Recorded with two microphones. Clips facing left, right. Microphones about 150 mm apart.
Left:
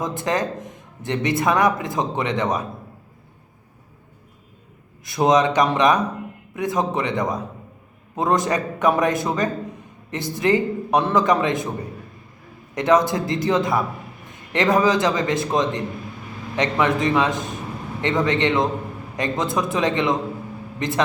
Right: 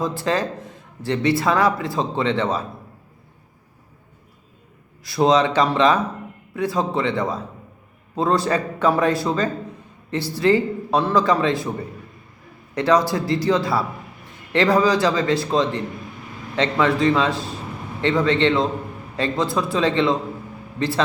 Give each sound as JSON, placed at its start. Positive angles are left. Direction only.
{"t": 0.0, "sound": "speech", "side_deg": 20}
{"t": 5.0, "sound": "speech", "side_deg": 20}
{"t": 12.7, "sound": "a man's voice", "side_deg": 20}